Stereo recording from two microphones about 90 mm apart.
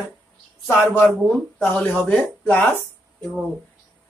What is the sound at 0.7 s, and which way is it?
Speech, 20° left (ahead or behind).